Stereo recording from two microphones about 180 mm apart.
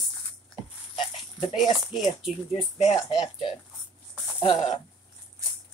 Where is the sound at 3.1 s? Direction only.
25° left (ahead or behind).